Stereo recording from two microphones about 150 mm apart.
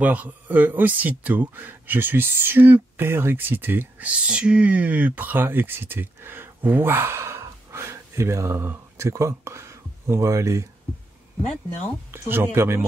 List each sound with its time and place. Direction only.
0.0 s a man's voice: 10° right (ahead or behind)
12.1 s a man's voice: 15° right (ahead or behind)